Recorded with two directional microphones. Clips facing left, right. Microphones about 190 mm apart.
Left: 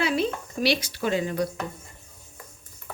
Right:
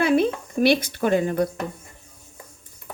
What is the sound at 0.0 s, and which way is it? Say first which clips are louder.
Speech: right 6 dB; 55° right (ahead or behind).